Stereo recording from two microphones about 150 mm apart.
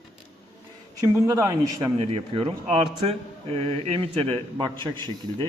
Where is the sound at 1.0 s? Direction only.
20° right (ahead or behind).